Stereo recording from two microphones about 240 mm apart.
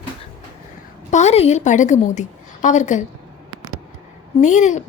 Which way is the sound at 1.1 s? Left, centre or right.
Left.